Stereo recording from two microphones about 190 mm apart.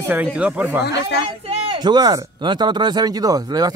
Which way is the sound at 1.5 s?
30° right (ahead or behind).